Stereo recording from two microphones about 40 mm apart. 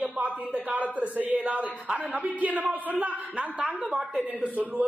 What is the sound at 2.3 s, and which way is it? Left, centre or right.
A man's voice, right.